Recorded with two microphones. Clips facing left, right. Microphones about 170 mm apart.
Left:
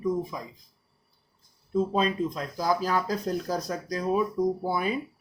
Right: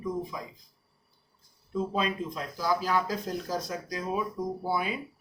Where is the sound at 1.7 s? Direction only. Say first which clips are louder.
Left 4 dB; 40° left (ahead or behind).